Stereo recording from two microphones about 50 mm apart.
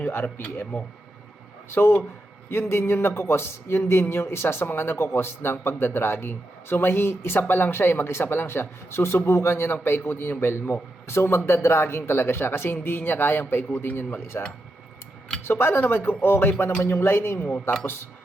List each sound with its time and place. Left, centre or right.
0.0 s speech: left
1.7 s speech: left
15.4 s speech: left